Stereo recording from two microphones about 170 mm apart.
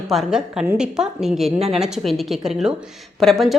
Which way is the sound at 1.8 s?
Centre (ahead or behind).